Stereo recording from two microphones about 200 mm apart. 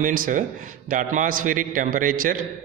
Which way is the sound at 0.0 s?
40° right (ahead or behind).